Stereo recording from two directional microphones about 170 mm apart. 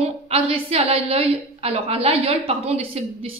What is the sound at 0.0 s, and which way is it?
A woman's voice, 35° right (ahead or behind).